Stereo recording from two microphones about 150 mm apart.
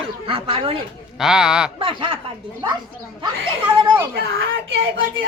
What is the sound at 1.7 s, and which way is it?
Speech, 35° right (ahead or behind).